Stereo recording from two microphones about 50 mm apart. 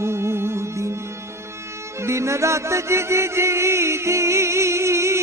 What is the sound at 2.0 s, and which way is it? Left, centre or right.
Music, right.